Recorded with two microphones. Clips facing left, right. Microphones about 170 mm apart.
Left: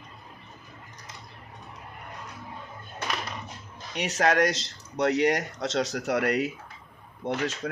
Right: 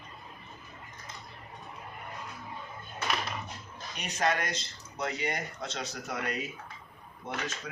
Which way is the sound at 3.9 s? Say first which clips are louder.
Left 6 dB; 80° left.